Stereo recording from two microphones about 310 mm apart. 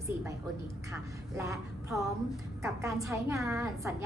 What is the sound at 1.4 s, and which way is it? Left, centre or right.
A woman's voice, centre.